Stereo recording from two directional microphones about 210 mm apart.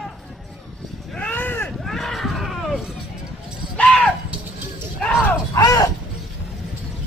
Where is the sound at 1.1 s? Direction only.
5° left (ahead or behind).